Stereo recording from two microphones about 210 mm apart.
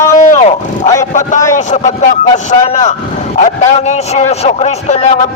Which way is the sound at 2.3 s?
30° left (ahead or behind).